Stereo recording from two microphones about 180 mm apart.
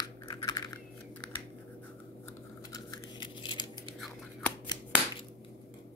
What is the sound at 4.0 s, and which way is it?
Scissors, 10° left (ahead or behind).